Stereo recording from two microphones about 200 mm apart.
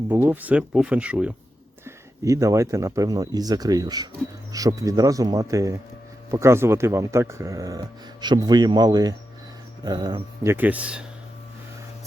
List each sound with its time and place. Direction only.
0.1 s speech: 10° right (ahead or behind)